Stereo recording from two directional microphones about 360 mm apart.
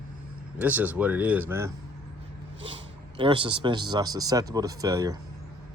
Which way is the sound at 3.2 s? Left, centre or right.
Centre.